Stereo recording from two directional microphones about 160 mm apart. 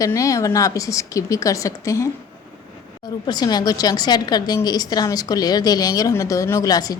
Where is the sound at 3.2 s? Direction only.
25° left (ahead or behind).